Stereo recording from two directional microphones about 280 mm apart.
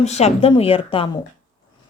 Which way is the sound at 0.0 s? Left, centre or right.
Left.